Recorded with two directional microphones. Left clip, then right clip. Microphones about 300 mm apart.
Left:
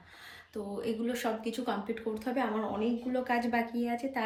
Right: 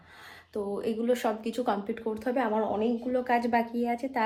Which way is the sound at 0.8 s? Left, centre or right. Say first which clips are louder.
Right 5 dB; centre.